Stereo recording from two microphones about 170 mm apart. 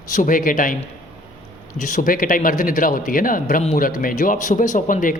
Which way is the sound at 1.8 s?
50° left (ahead or behind).